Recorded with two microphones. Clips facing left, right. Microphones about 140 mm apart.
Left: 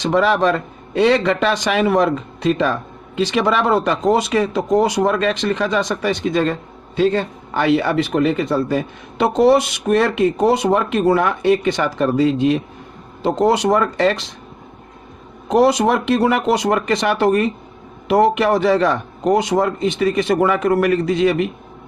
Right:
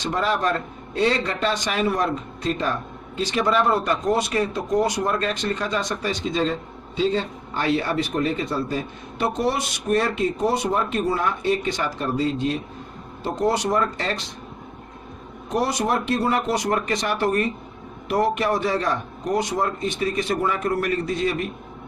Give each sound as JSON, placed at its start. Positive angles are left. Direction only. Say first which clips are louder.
{"t": 0.0, "sound": "a man's voice", "louder": "left 7 dB", "side_deg": 90}
{"t": 0.9, "sound": "speech", "louder": "left 7 dB", "side_deg": 75}
{"t": 15.4, "sound": "speech", "louder": "left 9 dB", "side_deg": 85}